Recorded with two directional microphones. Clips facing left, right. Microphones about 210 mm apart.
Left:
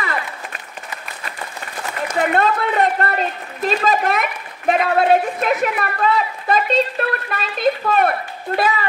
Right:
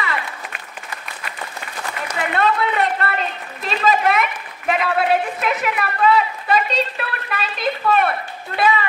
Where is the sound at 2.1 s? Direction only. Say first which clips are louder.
Left 3 dB; 40° left (ahead or behind).